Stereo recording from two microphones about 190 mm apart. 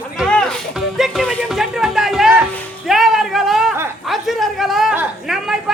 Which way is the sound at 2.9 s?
Centre (ahead or behind).